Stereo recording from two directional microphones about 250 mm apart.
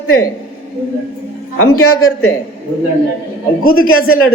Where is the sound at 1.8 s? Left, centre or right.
Left.